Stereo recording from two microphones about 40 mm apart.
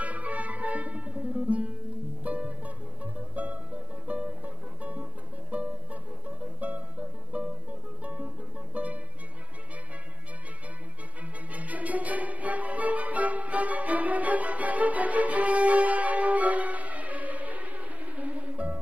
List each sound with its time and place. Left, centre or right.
0.0 s music: right
5.5 s music: right
11.5 s music: right